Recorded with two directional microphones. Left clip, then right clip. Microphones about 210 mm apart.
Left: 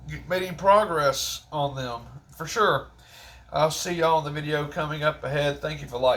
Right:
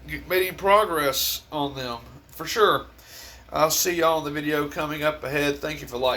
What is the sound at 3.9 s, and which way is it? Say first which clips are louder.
Speech: even; 30° right (ahead or behind).